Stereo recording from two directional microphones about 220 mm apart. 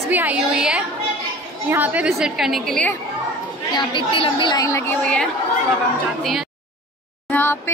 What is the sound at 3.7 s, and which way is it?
A woman's voice, 25° left (ahead or behind).